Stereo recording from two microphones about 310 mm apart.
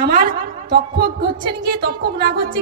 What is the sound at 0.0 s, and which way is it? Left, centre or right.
A woman's voice, right.